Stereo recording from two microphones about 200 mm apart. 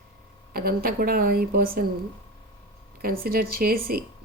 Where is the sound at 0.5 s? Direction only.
50° right (ahead or behind).